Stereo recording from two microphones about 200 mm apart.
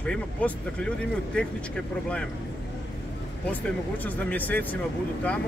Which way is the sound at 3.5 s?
10° left (ahead or behind).